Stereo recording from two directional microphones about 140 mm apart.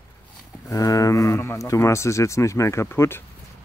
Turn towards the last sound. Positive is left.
turn(degrees=15)  # may be behind; listen again after turning